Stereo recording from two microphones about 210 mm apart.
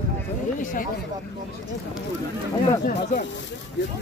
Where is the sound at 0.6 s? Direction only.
40° left (ahead or behind).